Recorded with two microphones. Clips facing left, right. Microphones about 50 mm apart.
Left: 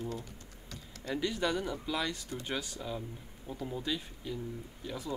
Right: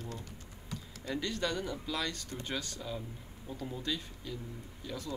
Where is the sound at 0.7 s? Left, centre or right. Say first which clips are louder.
Right 5 dB; centre.